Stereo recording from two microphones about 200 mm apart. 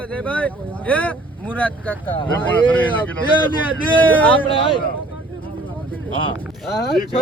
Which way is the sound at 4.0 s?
10° left (ahead or behind).